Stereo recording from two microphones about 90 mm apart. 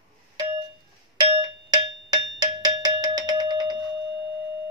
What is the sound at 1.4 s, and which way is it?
Cowbell, 50° right (ahead or behind).